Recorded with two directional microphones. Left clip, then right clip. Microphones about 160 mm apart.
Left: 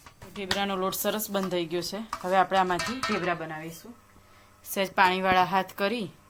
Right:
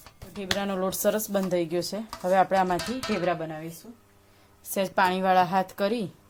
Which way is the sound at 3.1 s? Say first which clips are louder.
Right 4 dB; 70° right (ahead or behind).